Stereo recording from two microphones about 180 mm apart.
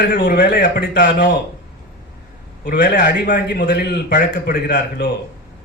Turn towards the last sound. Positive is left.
turn(degrees=50)  # may be behind; listen again after turning